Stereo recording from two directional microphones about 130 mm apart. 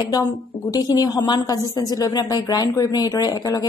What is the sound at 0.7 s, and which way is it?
A woman's voice, 30° left (ahead or behind).